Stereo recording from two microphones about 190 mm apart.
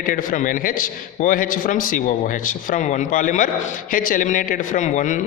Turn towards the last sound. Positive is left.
turn(degrees=40)  # may be behind; listen again after turning